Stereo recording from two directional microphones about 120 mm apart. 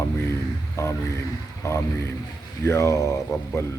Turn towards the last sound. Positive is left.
turn(degrees=25)  # may be behind; listen again after turning